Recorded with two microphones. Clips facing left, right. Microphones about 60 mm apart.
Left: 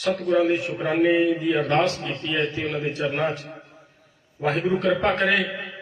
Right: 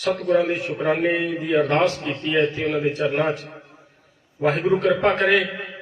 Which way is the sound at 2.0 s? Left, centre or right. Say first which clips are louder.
Right 3 dB; centre.